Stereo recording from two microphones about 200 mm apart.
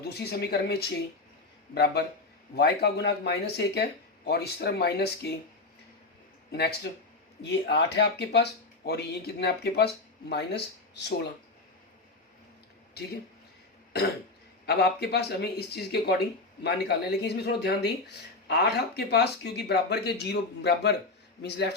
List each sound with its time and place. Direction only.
0.0 s speech: 55° left (ahead or behind)
6.5 s speech: 55° left (ahead or behind)
14.7 s speech: 55° left (ahead or behind)